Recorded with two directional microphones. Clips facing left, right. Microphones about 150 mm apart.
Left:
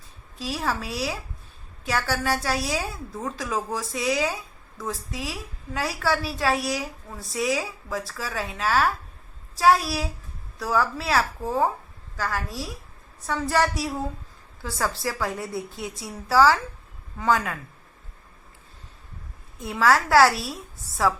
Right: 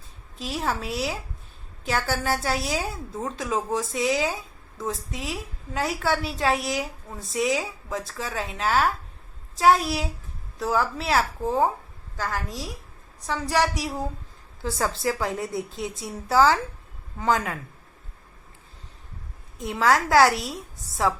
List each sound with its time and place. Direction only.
0.3 s a woman's voice: 25° right (ahead or behind)
14.6 s a woman's voice: 25° right (ahead or behind)
19.5 s a woman's voice: 20° right (ahead or behind)